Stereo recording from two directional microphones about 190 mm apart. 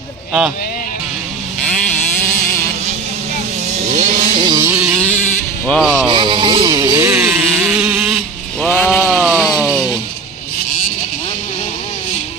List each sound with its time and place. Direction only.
3.7 s vehicle: 40° right (ahead or behind)
4.4 s vehicle: 20° right (ahead or behind)
5.7 s speech: centre (ahead or behind)
6.0 s music: 25° right (ahead or behind); by 8.2 s 5° right (ahead or behind)
8.6 s sheep: 5° left (ahead or behind)